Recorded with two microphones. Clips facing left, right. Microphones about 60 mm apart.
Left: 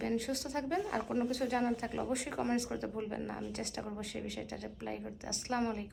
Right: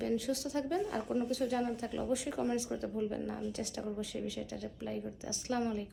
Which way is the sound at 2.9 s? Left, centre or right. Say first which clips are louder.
Right 2 dB; left.